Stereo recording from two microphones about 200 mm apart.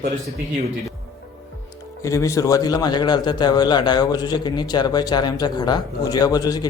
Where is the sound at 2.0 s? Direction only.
15° left (ahead or behind).